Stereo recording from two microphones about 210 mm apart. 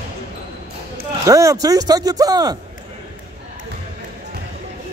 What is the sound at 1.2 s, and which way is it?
Speech, 15° right (ahead or behind).